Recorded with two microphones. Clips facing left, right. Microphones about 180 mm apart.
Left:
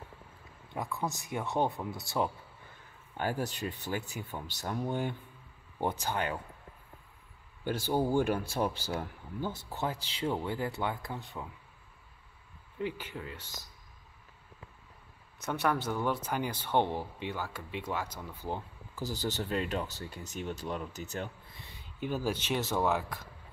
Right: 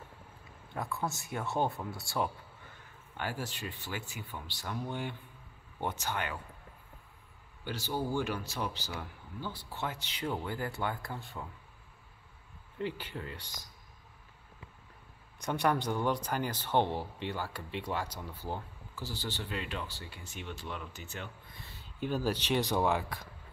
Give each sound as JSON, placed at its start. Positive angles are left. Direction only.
{"t": 1.0, "sound": "speech", "side_deg": 15}
{"t": 3.2, "sound": "speech", "side_deg": 40}
{"t": 7.6, "sound": "speech", "side_deg": 50}
{"t": 9.8, "sound": "speech", "side_deg": 30}
{"t": 12.7, "sound": "speech", "side_deg": 10}
{"t": 15.4, "sound": "speech", "side_deg": 5}
{"t": 18.0, "sound": "speech", "side_deg": -10}
{"t": 18.9, "sound": "speech", "side_deg": 40}
{"t": 21.6, "sound": "speech", "side_deg": 10}